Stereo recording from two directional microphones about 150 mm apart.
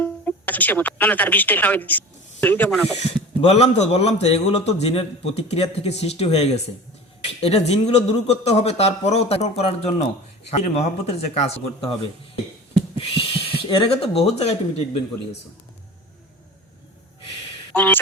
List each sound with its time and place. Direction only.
0.0 s speech: 10° left (ahead or behind)
2.6 s speech: centre (ahead or behind)
3.4 s a man's voice: 45° left (ahead or behind)
13.0 s speech: 35° left (ahead or behind)
17.7 s speech: 10° left (ahead or behind)